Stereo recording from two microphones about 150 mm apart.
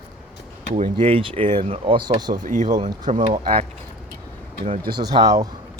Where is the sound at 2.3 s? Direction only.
60° right (ahead or behind).